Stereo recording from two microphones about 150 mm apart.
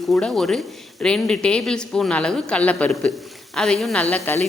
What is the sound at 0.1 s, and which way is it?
A woman's voice, 5° left (ahead or behind).